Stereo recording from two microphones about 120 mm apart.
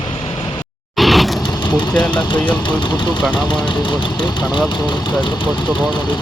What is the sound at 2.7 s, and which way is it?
Speech, 40° left (ahead or behind).